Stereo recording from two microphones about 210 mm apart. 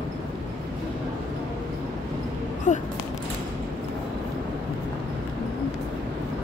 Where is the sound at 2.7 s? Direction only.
35° left (ahead or behind).